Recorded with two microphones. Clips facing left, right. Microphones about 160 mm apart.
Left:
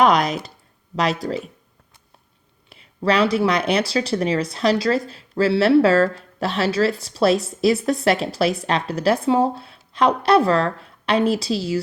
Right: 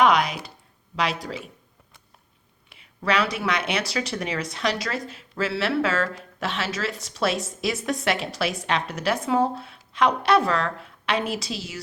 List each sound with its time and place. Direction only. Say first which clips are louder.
0.0 s a sound: left 3 dB; 35° left (ahead or behind)
0.9 s a woman's voice: left 5 dB; 40° left (ahead or behind)
2.6 s a woman's voice: left 5 dB; 35° left (ahead or behind)